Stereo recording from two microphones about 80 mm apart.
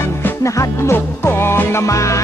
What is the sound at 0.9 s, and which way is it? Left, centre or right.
Music, left.